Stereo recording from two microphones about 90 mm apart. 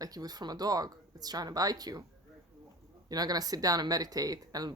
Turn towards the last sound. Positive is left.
turn(degrees=-45)  # may be behind; listen again after turning